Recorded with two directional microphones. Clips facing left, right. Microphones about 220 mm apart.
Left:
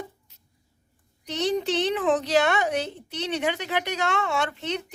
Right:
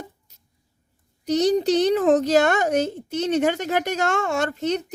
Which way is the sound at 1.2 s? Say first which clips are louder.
Right 7 dB; 40° right (ahead or behind).